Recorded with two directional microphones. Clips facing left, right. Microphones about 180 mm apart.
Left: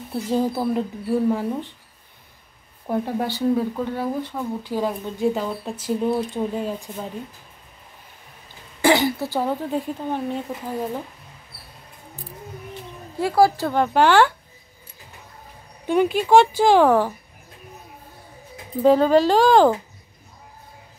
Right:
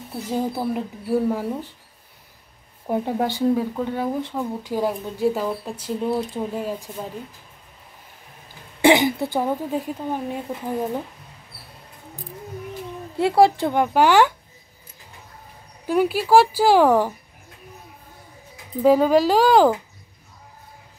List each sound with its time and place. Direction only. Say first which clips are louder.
0.3 s speech: left 2 dB; 10° right (ahead or behind)
2.9 s speech: right 1 dB; 15° right (ahead or behind)
8.8 s speech: right 2 dB; 20° right (ahead or behind)
13.2 s speech: right 1 dB; 25° right (ahead or behind)
15.9 s speech: left 1 dB; 5° right (ahead or behind)
18.8 s speech: even; 10° right (ahead or behind)